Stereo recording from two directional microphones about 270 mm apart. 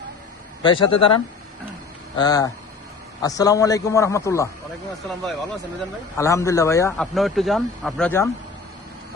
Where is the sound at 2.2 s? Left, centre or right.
Centre.